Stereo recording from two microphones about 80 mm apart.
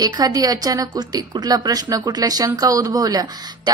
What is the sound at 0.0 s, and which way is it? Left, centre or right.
A woman's voice, right.